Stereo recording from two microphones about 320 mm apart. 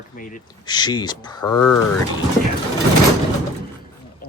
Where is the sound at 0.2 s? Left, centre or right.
Left.